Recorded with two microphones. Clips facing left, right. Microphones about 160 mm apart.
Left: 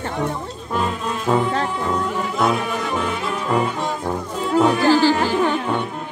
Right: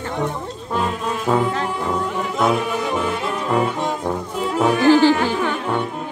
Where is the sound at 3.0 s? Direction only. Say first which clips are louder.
Right 1 dB; centre (ahead or behind).